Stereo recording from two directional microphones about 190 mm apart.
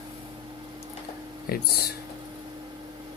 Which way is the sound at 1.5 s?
55° left (ahead or behind).